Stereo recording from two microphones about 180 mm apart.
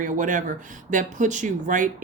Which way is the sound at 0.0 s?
45° right (ahead or behind).